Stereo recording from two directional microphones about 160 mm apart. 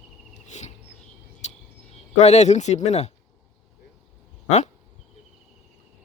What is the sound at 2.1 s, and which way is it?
Speech, 45° left (ahead or behind).